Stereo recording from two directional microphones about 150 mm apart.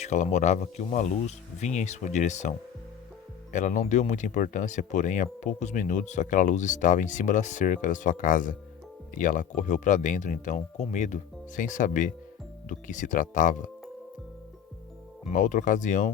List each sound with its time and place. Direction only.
0.0 s speech: 50° left (ahead or behind)
3.5 s speech: 55° left (ahead or behind)
15.2 s speech: 50° left (ahead or behind)